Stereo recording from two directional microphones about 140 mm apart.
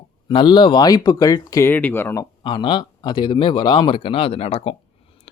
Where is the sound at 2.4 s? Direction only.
35° left (ahead or behind).